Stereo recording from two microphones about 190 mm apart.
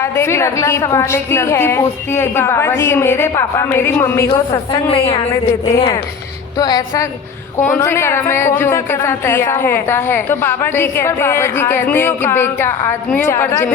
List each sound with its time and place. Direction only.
0.0 s a woman's voice: 15° left (ahead or behind)